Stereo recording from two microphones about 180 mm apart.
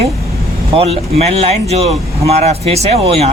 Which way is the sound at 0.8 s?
35° right (ahead or behind).